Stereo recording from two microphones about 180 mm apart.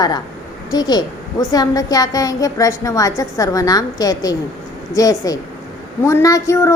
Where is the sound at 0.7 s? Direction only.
20° left (ahead or behind).